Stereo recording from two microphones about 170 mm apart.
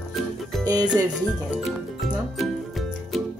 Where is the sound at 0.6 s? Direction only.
25° right (ahead or behind).